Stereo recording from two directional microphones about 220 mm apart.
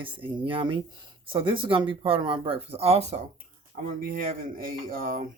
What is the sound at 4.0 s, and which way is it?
Speech, 40° right (ahead or behind).